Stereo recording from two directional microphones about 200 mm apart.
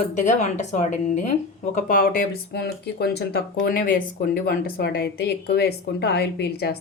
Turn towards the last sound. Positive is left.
turn(degrees=55)  # may be behind; listen again after turning